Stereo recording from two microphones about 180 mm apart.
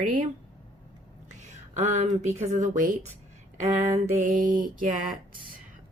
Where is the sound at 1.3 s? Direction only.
40° right (ahead or behind).